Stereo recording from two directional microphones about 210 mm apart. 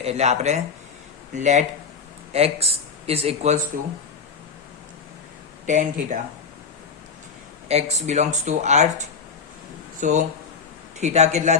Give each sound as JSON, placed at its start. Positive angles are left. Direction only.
{"t": 0.0, "sound": "speech", "side_deg": -30}
{"t": 5.6, "sound": "speech", "side_deg": -35}
{"t": 7.7, "sound": "speech", "side_deg": -30}